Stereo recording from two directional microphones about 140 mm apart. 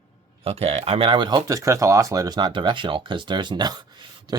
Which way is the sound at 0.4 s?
45° right (ahead or behind).